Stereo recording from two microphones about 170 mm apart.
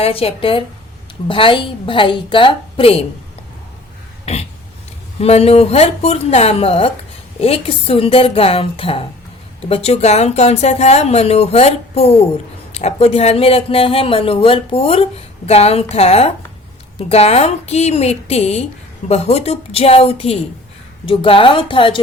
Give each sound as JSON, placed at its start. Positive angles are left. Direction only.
{"t": 0.0, "sound": "speech", "side_deg": 35}
{"t": 4.3, "sound": "a sound", "side_deg": 40}
{"t": 5.2, "sound": "speech", "side_deg": 40}